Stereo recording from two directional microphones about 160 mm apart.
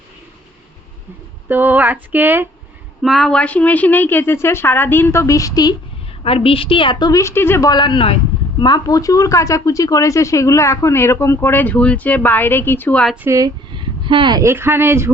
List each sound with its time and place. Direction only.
1.5 s speech: 10° right (ahead or behind)
3.0 s a woman's voice: centre (ahead or behind); by 5.7 s 20° left (ahead or behind)
6.2 s a woman's voice: 35° left (ahead or behind); by 13.1 s 5° left (ahead or behind)
13.2 s speech: 20° right (ahead or behind)